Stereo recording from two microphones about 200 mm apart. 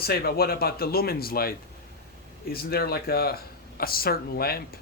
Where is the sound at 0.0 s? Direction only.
50° left (ahead or behind).